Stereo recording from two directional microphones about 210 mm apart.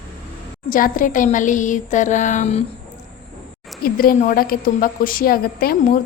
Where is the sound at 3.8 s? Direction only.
45° left (ahead or behind).